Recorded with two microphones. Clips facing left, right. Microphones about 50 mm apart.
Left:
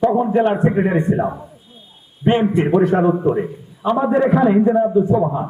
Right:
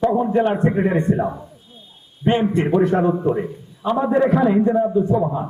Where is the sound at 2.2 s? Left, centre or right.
Centre.